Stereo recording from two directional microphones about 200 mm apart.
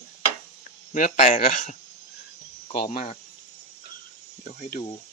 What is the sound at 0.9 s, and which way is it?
Speech, 40° left (ahead or behind).